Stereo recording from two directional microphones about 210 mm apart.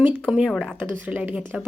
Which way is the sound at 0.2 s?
Centre (ahead or behind).